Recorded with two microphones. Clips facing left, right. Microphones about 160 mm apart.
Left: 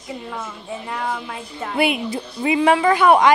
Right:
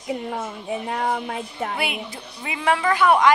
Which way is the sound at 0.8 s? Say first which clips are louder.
Right 1 dB; 55° right (ahead or behind).